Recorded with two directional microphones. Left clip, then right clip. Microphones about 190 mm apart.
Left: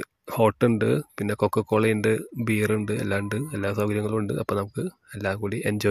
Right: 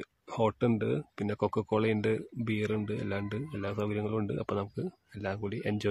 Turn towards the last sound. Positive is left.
turn(degrees=20)  # may be behind; listen again after turning